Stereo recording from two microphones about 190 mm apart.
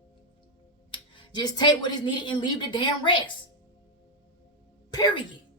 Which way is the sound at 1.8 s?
25° left (ahead or behind).